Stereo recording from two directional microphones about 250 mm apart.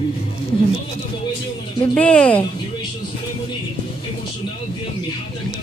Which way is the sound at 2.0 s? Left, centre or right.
Centre.